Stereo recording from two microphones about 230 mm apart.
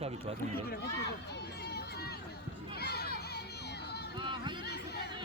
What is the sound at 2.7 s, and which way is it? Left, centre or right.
Children playing, left.